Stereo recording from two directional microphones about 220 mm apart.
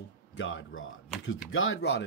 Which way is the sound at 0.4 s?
60° left (ahead or behind).